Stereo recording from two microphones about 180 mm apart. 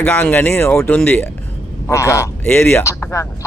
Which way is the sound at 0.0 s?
10° left (ahead or behind).